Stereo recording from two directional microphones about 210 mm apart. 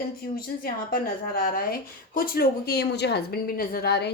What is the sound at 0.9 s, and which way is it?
Speech, 45° left (ahead or behind).